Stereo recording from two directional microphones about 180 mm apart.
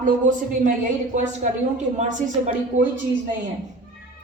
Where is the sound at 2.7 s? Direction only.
45° right (ahead or behind).